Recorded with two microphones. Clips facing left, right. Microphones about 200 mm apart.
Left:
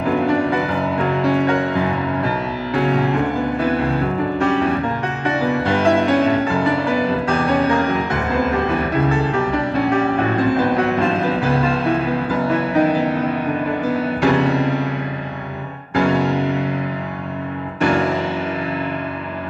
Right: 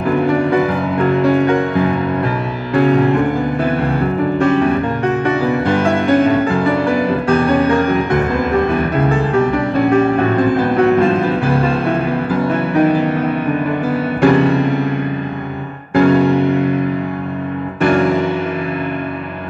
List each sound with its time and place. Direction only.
0.3 s music: 55° right (ahead or behind)
2.7 s music: 55° right (ahead or behind)
4.4 s music: 55° right (ahead or behind)
9.3 s music: 55° right (ahead or behind)
15.9 s music: 55° right (ahead or behind)
17.8 s music: 55° right (ahead or behind)